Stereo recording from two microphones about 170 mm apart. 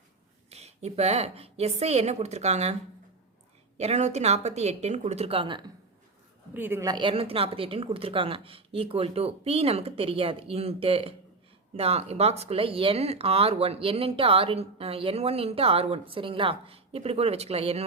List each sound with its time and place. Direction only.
0.5 s speech: 40° right (ahead or behind)
3.8 s speech: 40° right (ahead or behind)
6.5 s speech: 10° right (ahead or behind); by 17.8 s 35° right (ahead or behind)